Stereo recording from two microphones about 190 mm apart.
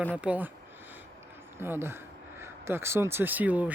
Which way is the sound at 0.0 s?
10° right (ahead or behind).